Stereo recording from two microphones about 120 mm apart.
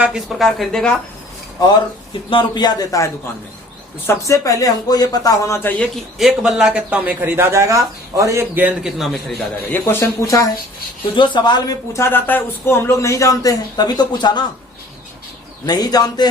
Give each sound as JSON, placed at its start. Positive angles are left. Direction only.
{"t": 0.0, "sound": "speech", "side_deg": -5}
{"t": 2.3, "sound": "a man's voice", "side_deg": 40}
{"t": 6.1, "sound": "a man's voice", "side_deg": -5}
{"t": 9.7, "sound": "a man's voice", "side_deg": 20}
{"t": 11.2, "sound": "speech", "side_deg": 40}
{"t": 12.0, "sound": "a man's voice", "side_deg": 15}
{"t": 15.6, "sound": "speech", "side_deg": 35}